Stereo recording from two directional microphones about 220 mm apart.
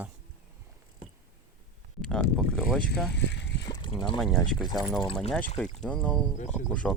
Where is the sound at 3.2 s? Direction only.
50° left (ahead or behind).